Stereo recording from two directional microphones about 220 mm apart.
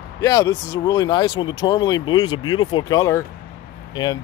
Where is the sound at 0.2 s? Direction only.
15° left (ahead or behind).